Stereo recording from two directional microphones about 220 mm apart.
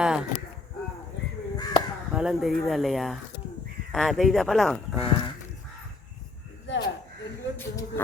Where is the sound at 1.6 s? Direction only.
15° left (ahead or behind).